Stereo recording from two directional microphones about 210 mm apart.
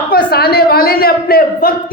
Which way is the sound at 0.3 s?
50° left (ahead or behind).